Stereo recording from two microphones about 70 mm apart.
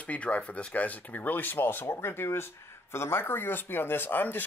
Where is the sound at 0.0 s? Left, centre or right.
Centre.